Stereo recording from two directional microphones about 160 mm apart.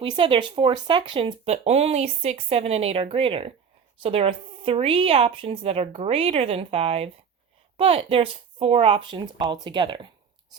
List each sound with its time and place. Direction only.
0.0 s speech: 30° right (ahead or behind)